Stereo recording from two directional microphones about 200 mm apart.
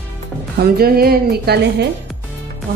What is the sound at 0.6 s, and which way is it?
A woman's voice, 50° right (ahead or behind).